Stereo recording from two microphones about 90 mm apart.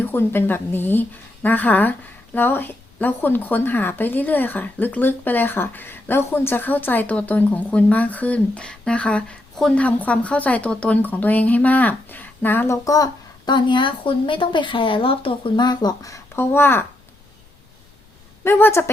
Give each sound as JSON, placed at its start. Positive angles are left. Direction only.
{"t": 0.0, "sound": "speech", "side_deg": 25}
{"t": 15.6, "sound": "speech", "side_deg": 55}
{"t": 16.0, "sound": "speech", "side_deg": 35}
{"t": 18.4, "sound": "speech", "side_deg": 25}